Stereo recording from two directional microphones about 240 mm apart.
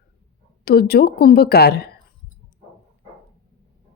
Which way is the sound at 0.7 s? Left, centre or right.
Left.